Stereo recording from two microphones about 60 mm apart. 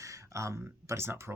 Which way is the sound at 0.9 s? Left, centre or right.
Right.